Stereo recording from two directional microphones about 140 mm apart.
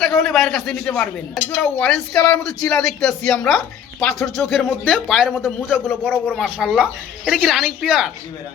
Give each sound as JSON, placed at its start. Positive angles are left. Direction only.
{"t": 0.0, "sound": "a man's voice", "side_deg": 0}
{"t": 5.9, "sound": "speech", "side_deg": 10}
{"t": 6.3, "sound": "speech", "side_deg": -5}